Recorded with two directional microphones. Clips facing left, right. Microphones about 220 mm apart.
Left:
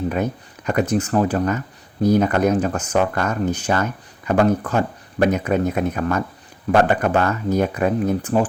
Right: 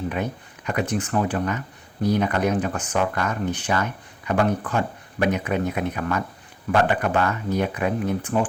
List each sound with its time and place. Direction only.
0.1 s speech: 40° left (ahead or behind)